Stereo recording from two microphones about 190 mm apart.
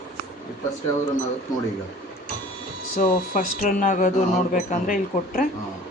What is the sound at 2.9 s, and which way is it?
Speech, 45° left (ahead or behind).